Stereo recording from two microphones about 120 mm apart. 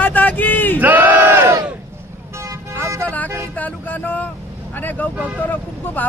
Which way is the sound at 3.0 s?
15° left (ahead or behind).